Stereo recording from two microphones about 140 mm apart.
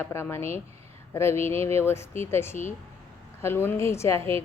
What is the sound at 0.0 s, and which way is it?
Speech, 15° left (ahead or behind).